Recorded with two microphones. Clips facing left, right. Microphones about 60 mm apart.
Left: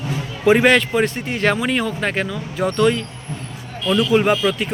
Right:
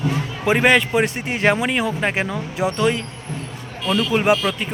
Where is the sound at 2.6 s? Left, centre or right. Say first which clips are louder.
Left 3 dB; centre.